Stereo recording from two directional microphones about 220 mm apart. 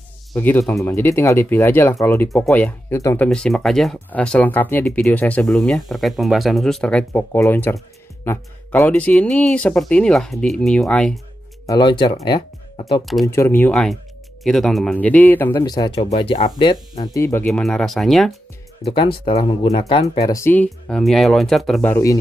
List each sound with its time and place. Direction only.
0.3 s a man's voice: 10° left (ahead or behind)
3.3 s speech: centre (ahead or behind)
11.6 s speech: 20° left (ahead or behind)
13.0 s speech: centre (ahead or behind)
13.3 s a man's voice: 10° left (ahead or behind)
18.9 s speech: 25° left (ahead or behind)
20.2 s speech: 15° left (ahead or behind)
21.9 s a man's voice: 15° left (ahead or behind)